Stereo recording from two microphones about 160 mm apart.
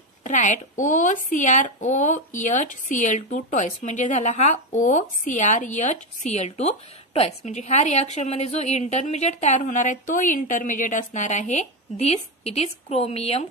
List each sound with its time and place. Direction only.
0.2 s speech: 50° left (ahead or behind)